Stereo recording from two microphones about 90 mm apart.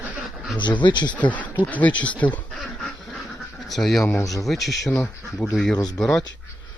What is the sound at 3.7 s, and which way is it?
Speech, centre (ahead or behind).